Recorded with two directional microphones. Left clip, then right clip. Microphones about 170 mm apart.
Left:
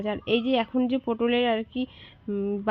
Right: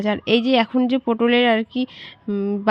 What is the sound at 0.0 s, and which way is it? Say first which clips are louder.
A woman's voice: right 7 dB; 25° right (ahead or behind).